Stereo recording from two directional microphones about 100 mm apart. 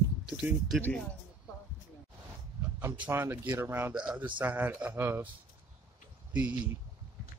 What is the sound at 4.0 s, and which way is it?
Speech, 10° right (ahead or behind).